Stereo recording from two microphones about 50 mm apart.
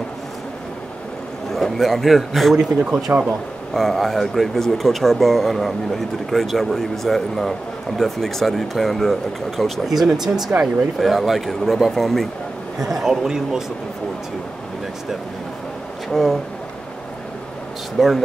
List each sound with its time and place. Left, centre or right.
1.5 s speech: centre
2.5 s a man's voice: centre
3.7 s speech: centre
12.7 s a man's voice: centre
16.1 s speech: centre
17.9 s speech: centre